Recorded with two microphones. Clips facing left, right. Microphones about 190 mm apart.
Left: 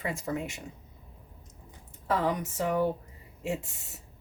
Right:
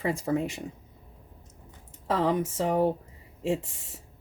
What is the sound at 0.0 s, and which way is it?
Speech, 30° right (ahead or behind).